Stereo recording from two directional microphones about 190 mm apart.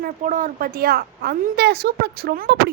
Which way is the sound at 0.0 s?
45° right (ahead or behind).